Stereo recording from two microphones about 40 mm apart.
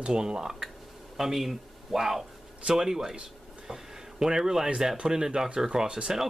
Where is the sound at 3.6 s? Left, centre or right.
Centre.